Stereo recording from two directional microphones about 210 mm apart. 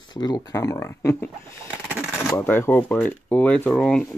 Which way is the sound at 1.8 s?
5° right (ahead or behind).